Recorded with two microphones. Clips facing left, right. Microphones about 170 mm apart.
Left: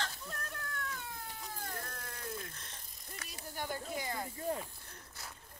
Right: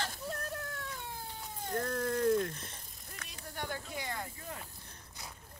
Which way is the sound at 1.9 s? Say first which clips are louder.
Right 15 dB; 55° right (ahead or behind).